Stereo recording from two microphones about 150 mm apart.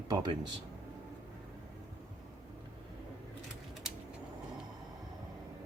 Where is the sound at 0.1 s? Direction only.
30° right (ahead or behind).